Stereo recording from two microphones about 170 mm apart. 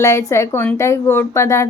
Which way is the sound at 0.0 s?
15° left (ahead or behind).